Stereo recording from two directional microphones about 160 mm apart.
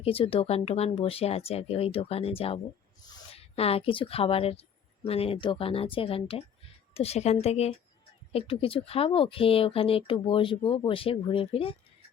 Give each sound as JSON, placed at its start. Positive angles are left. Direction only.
{"t": 0.0, "sound": "speech", "side_deg": 35}